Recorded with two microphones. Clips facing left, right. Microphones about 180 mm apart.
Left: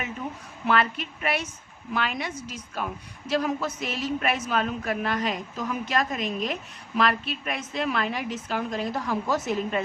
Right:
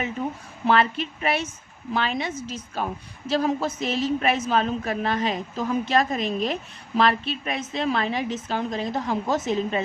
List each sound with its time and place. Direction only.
0.6 s a woman's voice: 30° right (ahead or behind)